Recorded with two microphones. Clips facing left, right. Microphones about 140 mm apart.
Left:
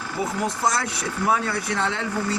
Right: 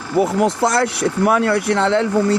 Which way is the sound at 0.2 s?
85° right.